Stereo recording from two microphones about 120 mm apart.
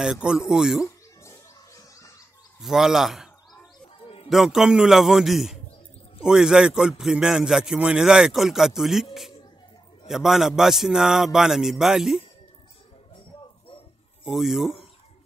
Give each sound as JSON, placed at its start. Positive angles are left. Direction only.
{"t": 0.0, "sound": "a man's voice", "side_deg": -5}
{"t": 0.8, "sound": "music", "side_deg": 25}
{"t": 2.6, "sound": "a man's voice", "side_deg": -5}
{"t": 4.3, "sound": "a man's voice", "side_deg": -5}
{"t": 10.0, "sound": "a man's voice", "side_deg": 0}
{"t": 14.2, "sound": "a man's voice", "side_deg": -5}